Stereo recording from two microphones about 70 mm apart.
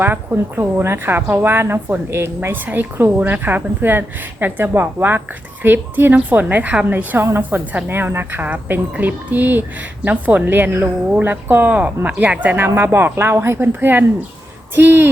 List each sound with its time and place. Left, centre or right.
0.0 s a woman's voice: right
2.6 s a woman's voice: right
12.6 s a woman's voice: right